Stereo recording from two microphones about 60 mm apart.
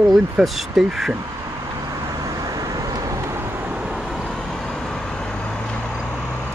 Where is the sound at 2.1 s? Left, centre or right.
Right.